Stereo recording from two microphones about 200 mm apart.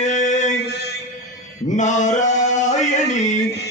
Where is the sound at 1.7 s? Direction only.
35° left (ahead or behind).